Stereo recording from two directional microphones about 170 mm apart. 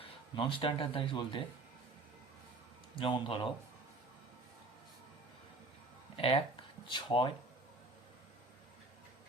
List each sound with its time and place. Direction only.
0.0 s speech: 30° left (ahead or behind)
2.9 s speech: 30° left (ahead or behind)
6.1 s speech: 35° left (ahead or behind)